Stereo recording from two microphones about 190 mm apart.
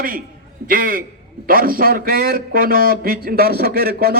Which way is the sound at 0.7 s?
50° right (ahead or behind).